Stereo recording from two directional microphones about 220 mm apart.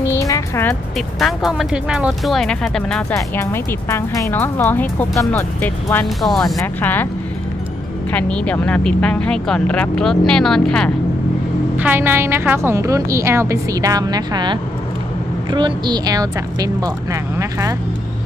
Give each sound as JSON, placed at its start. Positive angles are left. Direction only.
{"t": 0.1, "sound": "speech", "side_deg": 15}
{"t": 3.2, "sound": "speech", "side_deg": 15}
{"t": 6.4, "sound": "speech", "side_deg": 15}
{"t": 8.1, "sound": "speech", "side_deg": 5}
{"t": 11.8, "sound": "a woman's voice", "side_deg": -10}